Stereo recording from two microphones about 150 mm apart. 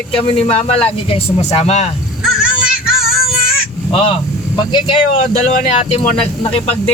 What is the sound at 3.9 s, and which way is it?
Speech, 35° left (ahead or behind).